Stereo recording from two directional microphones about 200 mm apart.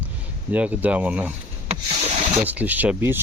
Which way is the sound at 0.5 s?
10° right (ahead or behind).